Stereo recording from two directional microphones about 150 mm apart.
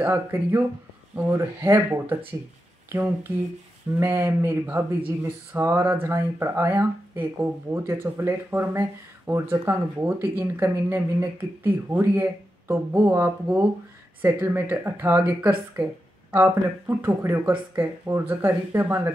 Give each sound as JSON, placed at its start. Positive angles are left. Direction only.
{"t": 0.0, "sound": "speech", "side_deg": -15}